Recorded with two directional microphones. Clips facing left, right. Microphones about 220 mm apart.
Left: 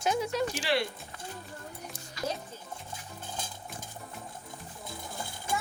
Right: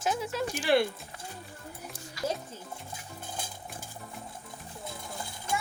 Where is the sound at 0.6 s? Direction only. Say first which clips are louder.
Right 10 dB; 50° right (ahead or behind).